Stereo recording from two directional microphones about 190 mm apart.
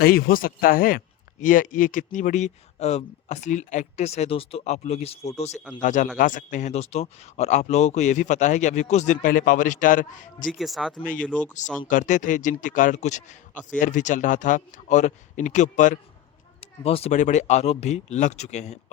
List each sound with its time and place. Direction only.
0.0 s a man's voice: 50° left (ahead or behind)
10.5 s speech: centre (ahead or behind)
11.9 s a man's voice: 40° left (ahead or behind)